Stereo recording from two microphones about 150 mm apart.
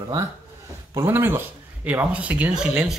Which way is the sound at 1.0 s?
15° right (ahead or behind).